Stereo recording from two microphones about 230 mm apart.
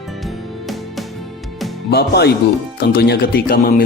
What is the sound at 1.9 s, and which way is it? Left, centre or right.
Speech, left.